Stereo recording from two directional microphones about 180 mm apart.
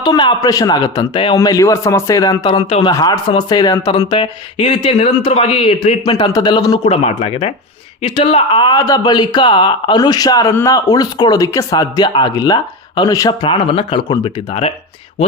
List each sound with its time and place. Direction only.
0.0 s speech: 25° left (ahead or behind)
6.8 s speech: 35° left (ahead or behind)